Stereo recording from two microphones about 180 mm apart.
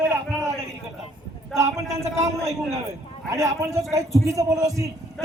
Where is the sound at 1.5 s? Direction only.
15° right (ahead or behind).